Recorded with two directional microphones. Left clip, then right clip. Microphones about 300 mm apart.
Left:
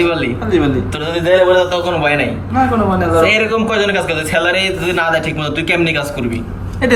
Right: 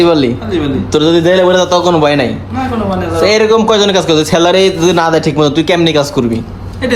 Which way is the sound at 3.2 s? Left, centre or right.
Centre.